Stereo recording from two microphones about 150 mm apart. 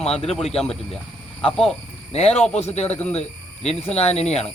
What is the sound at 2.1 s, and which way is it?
Speech, 45° left (ahead or behind).